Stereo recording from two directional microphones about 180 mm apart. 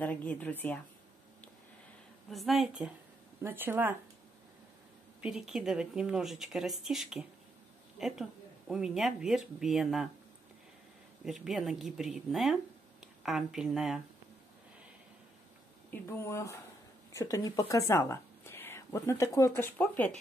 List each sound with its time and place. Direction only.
0.0 s speech: 10° left (ahead or behind)
2.3 s speech: centre (ahead or behind)
5.2 s speech: centre (ahead or behind)
11.2 s speech: 5° right (ahead or behind)
15.9 s speech: 15° left (ahead or behind)